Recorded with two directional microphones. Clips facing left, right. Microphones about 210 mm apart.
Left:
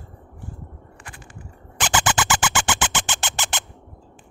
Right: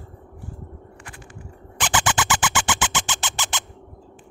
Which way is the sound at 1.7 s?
45° left (ahead or behind).